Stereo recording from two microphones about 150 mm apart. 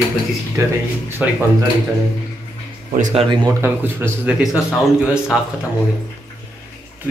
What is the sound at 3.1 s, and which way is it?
Speech, 40° right (ahead or behind).